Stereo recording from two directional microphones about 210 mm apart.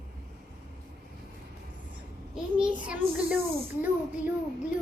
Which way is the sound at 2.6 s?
5° right (ahead or behind).